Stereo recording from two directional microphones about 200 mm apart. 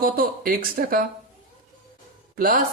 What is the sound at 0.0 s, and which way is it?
Speech, 45° right (ahead or behind).